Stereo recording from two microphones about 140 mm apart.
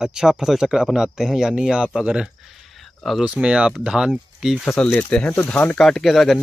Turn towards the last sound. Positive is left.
turn(degrees=0)  # may be behind; listen again after turning